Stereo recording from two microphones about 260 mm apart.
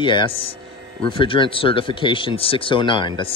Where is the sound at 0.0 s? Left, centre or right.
Centre.